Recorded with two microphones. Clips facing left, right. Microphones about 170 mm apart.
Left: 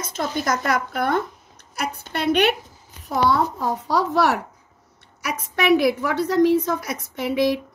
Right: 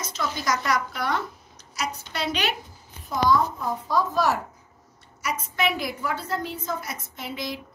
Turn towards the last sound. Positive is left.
turn(degrees=70)  # may be behind; listen again after turning